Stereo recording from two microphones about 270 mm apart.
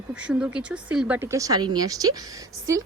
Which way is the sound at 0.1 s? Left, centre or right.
Centre.